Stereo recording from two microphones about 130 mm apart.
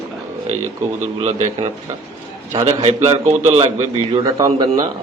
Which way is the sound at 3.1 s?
55° right (ahead or behind).